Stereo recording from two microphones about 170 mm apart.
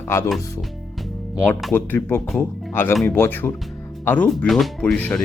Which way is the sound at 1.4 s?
5° left (ahead or behind).